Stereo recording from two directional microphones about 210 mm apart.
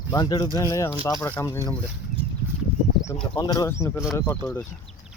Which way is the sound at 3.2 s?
20° left (ahead or behind).